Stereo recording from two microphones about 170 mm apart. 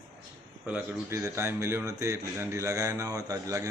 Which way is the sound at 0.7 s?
15° right (ahead or behind).